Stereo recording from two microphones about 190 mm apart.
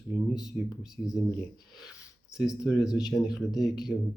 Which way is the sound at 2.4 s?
5° right (ahead or behind).